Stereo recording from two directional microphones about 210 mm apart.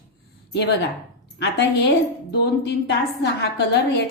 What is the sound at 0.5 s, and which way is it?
A woman's voice, 50° left (ahead or behind).